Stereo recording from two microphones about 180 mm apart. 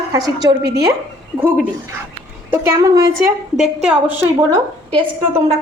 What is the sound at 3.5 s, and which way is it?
Speech, 5° right (ahead or behind).